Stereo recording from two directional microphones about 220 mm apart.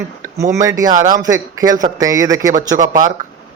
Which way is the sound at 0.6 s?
15° right (ahead or behind).